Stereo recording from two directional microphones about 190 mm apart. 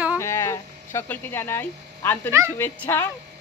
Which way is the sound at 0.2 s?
15° left (ahead or behind).